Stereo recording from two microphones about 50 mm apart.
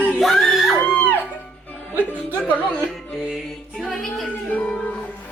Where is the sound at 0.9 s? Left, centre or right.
Left.